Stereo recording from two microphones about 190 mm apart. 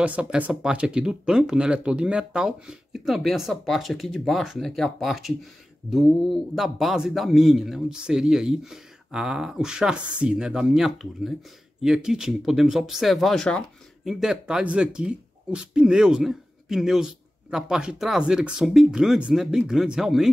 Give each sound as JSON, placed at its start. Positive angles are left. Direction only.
{"t": 0.0, "sound": "speech", "side_deg": -5}